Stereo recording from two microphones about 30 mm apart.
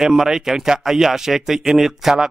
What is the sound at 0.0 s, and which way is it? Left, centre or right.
Speech, centre.